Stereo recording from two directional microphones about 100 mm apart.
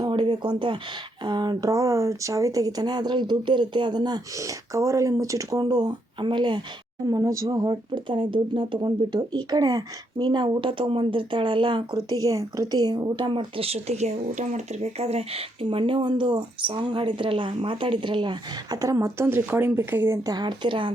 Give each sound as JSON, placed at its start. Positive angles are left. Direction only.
{"t": 0.1, "sound": "a sound", "side_deg": -45}
{"t": 1.2, "sound": "speech", "side_deg": -50}
{"t": 1.7, "sound": "speech", "side_deg": -30}
{"t": 7.0, "sound": "speech", "side_deg": -35}
{"t": 11.9, "sound": "speech", "side_deg": -40}
{"t": 13.6, "sound": "speech", "side_deg": -85}
{"t": 20.2, "sound": "speech", "side_deg": -45}